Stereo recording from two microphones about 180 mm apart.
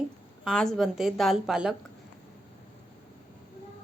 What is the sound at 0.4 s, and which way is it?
A woman's voice, centre (ahead or behind).